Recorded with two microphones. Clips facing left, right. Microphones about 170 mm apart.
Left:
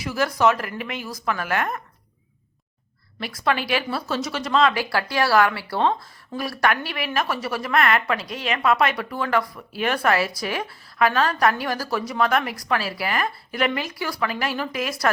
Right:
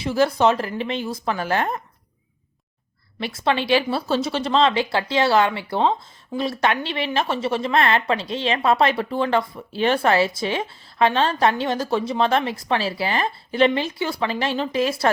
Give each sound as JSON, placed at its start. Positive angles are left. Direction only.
{"t": 0.0, "sound": "speech", "side_deg": -30}
{"t": 3.2, "sound": "speech", "side_deg": -25}